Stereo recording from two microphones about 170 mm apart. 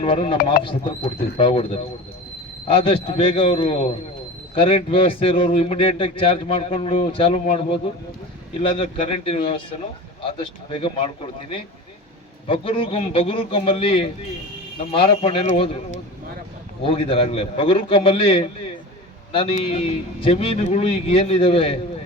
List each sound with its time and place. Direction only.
0.0 s a man's voice: 35° left (ahead or behind)
0.6 s speech: 60° left (ahead or behind)
1.4 s a man's voice: 35° left (ahead or behind)
12.5 s a man's voice: 30° left (ahead or behind)
16.8 s a man's voice: 35° left (ahead or behind)